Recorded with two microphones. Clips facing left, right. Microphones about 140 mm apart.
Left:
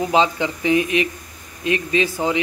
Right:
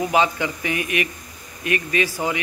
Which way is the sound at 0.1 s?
25° left (ahead or behind).